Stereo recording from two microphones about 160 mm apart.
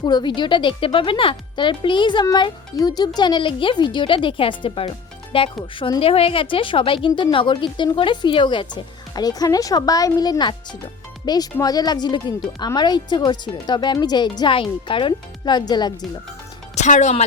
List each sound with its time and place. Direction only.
0.0 s a woman's voice: 25° left (ahead or behind)
16.7 s speech: 50° left (ahead or behind)